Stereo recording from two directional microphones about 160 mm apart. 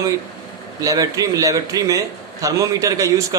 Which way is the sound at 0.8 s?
20° right (ahead or behind).